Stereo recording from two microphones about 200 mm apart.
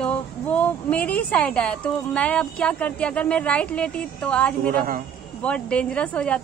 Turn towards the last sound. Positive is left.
turn(degrees=5)  # may be behind; listen again after turning